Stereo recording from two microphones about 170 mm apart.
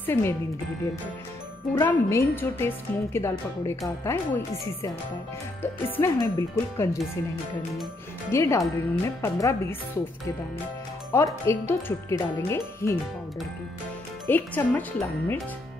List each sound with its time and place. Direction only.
0.0 s speech: 15° left (ahead or behind)
1.8 s a woman's voice: 15° left (ahead or behind)
8.3 s a woman's voice: 15° left (ahead or behind)
11.1 s a woman's voice: 15° left (ahead or behind)
14.2 s a woman's voice: 10° left (ahead or behind)